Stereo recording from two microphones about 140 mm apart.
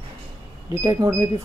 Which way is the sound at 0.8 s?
25° right (ahead or behind).